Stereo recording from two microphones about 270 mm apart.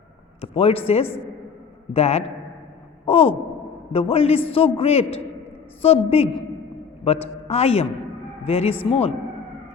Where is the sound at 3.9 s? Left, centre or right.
Left.